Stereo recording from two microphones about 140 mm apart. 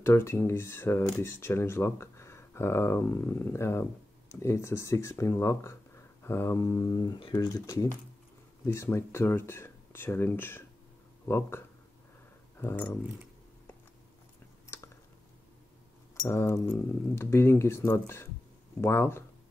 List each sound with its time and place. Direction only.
0.0 s speech: 20° left (ahead or behind)
14.7 s a sound: 20° left (ahead or behind)
16.3 s speech: 15° left (ahead or behind)